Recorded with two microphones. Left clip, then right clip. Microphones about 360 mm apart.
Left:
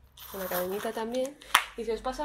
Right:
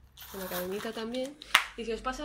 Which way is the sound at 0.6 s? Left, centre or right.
Left.